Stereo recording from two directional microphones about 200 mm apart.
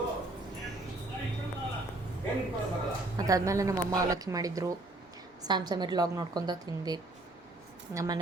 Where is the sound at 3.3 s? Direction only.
15° right (ahead or behind).